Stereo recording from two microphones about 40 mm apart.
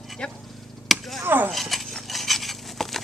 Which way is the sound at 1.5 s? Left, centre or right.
Centre.